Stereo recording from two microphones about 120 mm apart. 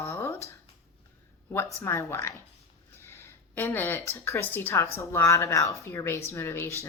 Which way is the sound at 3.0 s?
20° left (ahead or behind).